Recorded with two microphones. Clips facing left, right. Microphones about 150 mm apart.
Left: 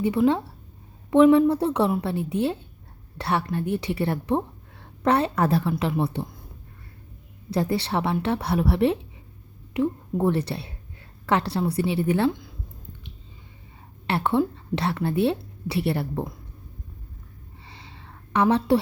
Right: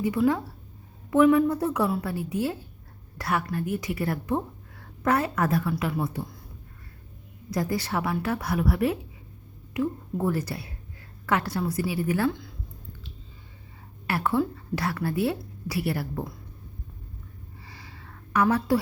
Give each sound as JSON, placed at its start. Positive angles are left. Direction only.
{"t": 0.0, "sound": "a woman's voice", "side_deg": 25}
{"t": 7.5, "sound": "a woman's voice", "side_deg": 30}
{"t": 14.1, "sound": "a woman's voice", "side_deg": 25}
{"t": 17.6, "sound": "a sound", "side_deg": 25}